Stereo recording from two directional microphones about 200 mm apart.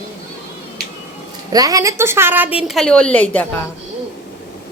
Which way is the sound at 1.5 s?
15° right (ahead or behind).